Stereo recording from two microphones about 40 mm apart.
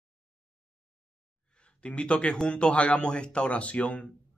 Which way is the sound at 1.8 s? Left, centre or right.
Left.